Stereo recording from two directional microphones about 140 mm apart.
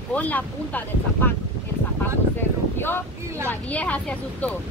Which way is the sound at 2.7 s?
15° left (ahead or behind).